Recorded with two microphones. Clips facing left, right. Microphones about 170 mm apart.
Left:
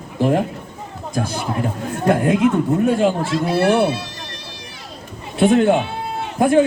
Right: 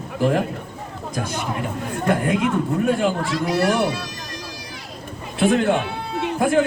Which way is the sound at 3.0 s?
25° left (ahead or behind).